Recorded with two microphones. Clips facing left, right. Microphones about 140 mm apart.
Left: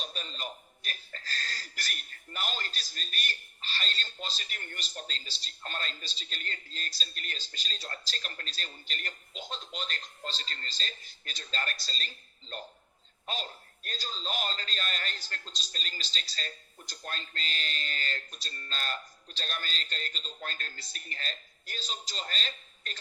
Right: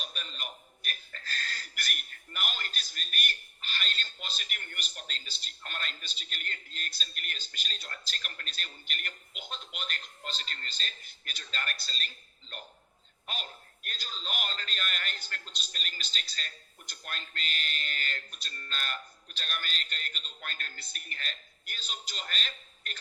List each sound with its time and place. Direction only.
0.0 s a man's voice: 35° left (ahead or behind)